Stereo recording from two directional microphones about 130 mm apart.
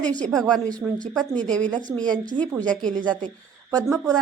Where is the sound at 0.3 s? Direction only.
5° left (ahead or behind).